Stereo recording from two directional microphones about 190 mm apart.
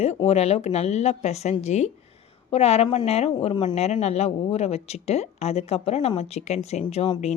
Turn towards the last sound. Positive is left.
turn(degrees=35)  # may be behind; listen again after turning